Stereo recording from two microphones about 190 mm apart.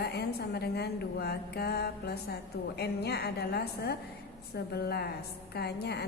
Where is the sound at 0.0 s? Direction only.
60° left (ahead or behind).